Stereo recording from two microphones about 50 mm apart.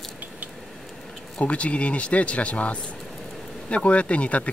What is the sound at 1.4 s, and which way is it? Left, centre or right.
Speech, left.